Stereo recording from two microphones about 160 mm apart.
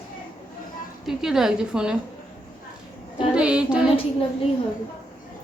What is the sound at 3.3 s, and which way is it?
Child singing, 5° right (ahead or behind).